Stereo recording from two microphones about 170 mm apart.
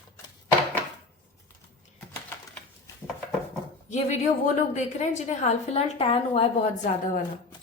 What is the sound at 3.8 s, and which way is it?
A woman's voice, 45° left (ahead or behind).